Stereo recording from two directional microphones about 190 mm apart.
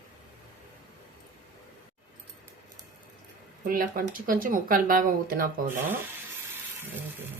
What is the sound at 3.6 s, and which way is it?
Speech, 45° right (ahead or behind).